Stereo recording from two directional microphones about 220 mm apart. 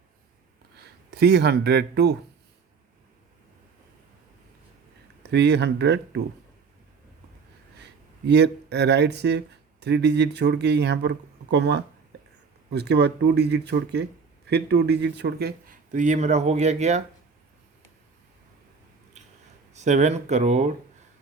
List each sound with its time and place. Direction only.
0.8 s speech: 45° right (ahead or behind)
5.2 s speech: 50° right (ahead or behind)
8.3 s speech: 50° right (ahead or behind); by 17.0 s 30° right (ahead or behind)
19.7 s speech: 30° right (ahead or behind)